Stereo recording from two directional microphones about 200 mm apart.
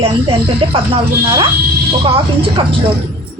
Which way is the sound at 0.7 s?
25° right (ahead or behind).